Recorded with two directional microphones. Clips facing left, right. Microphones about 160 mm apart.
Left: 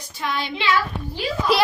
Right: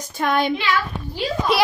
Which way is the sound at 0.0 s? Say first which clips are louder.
Right 7 dB; 50° right (ahead or behind).